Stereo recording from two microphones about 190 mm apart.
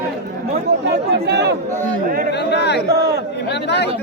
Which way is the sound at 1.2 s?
65° right (ahead or behind).